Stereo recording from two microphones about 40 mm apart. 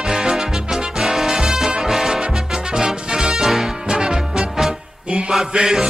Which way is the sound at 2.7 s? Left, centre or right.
Centre.